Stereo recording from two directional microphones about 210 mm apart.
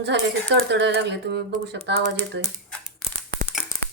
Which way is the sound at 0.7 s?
55° right (ahead or behind).